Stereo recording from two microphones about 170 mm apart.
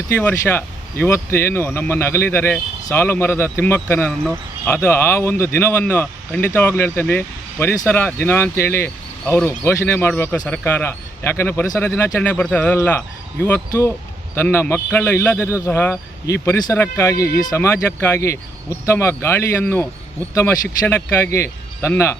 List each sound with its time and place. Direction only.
0.2 s speech: 10° left (ahead or behind)
15.4 s speech: 10° right (ahead or behind)
15.6 s speech: 15° left (ahead or behind)